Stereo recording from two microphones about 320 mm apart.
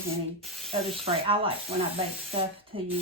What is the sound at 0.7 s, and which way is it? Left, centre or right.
Speech, centre.